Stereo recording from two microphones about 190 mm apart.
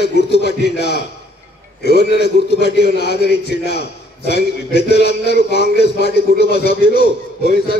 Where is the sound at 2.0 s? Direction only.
60° left (ahead or behind).